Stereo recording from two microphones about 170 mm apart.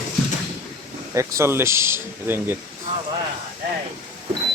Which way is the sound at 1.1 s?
15° right (ahead or behind).